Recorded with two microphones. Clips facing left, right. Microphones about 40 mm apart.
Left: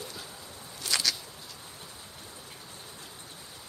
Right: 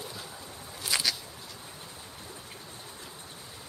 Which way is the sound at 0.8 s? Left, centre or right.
Centre.